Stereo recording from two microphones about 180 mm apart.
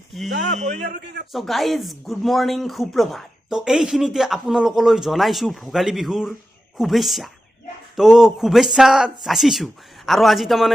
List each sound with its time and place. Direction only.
0.1 s speech: centre (ahead or behind)
0.8 s a man's voice: 70° right (ahead or behind)
1.3 s speech: centre (ahead or behind)